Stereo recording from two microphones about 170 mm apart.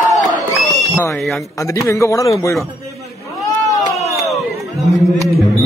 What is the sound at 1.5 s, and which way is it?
A man's voice, 15° left (ahead or behind).